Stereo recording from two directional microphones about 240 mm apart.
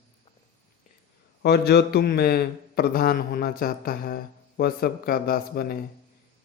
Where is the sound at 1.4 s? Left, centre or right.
Left.